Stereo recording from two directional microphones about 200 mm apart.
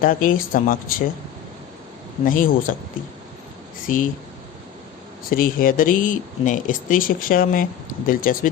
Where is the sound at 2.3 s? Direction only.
45° left (ahead or behind).